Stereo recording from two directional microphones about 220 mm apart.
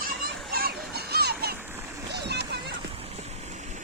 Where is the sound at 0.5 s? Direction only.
45° right (ahead or behind).